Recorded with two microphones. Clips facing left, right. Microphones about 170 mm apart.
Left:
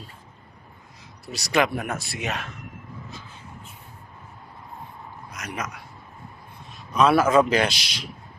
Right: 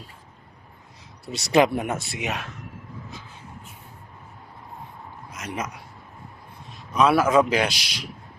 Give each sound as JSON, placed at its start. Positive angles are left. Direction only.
{"t": 1.2, "sound": "speech", "side_deg": -25}
{"t": 5.3, "sound": "a man's voice", "side_deg": -25}
{"t": 6.9, "sound": "a man's voice", "side_deg": -10}